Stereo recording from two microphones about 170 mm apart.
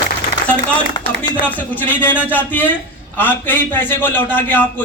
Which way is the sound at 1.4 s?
10° left (ahead or behind).